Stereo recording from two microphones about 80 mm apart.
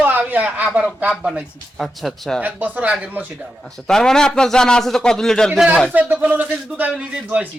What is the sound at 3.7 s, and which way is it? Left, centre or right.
A man's voice, centre.